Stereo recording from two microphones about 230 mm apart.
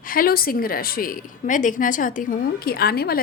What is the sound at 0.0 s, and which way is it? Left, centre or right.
A woman's voice, left.